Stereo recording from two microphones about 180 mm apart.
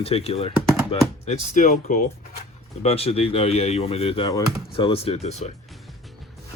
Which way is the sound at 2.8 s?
35° left (ahead or behind).